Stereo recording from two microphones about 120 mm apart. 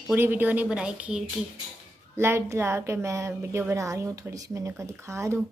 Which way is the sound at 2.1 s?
20° right (ahead or behind).